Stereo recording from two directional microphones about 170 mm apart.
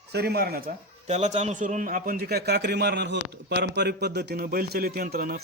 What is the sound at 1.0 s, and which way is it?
A man's voice, 40° right (ahead or behind).